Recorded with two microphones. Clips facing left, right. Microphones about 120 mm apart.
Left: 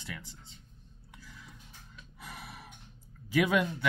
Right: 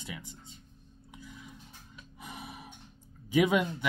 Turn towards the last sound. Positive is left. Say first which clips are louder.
# right 2 dB
turn(degrees=-20)  # may be behind; listen again after turning